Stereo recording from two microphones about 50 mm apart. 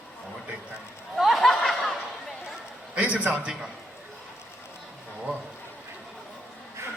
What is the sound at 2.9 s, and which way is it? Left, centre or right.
Speech, right.